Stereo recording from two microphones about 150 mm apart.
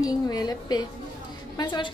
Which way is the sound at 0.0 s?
25° left (ahead or behind).